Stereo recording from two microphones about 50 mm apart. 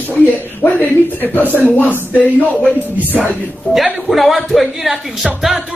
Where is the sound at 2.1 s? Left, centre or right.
Left.